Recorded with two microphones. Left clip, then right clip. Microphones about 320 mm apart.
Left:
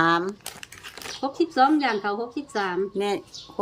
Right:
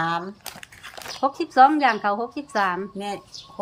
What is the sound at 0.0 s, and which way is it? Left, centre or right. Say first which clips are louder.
Crumpling: left 4 dB; centre.